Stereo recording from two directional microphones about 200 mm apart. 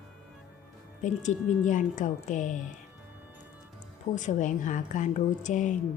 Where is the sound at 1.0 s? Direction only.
40° left (ahead or behind).